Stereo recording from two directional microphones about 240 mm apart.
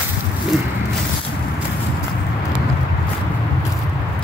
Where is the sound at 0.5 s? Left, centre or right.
Centre.